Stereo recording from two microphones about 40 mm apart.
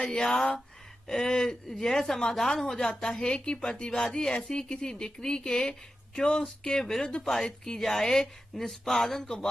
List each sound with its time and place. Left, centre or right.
0.0 s a woman's voice: centre